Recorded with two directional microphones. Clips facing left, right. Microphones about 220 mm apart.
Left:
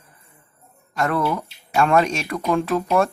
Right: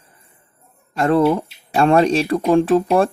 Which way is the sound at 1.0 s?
30° right (ahead or behind).